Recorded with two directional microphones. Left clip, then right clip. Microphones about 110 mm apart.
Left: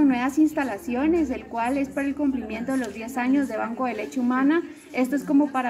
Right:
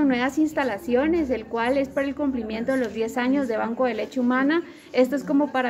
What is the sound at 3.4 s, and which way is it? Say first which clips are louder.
A woman's voice: right 3 dB; 30° right (ahead or behind).